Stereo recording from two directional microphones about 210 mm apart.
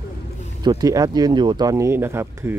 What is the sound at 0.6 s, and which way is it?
Speech, 15° right (ahead or behind).